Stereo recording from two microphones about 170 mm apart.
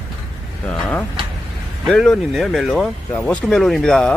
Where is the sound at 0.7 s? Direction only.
5° left (ahead or behind).